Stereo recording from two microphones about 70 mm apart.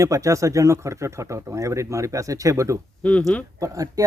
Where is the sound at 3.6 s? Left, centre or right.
Right.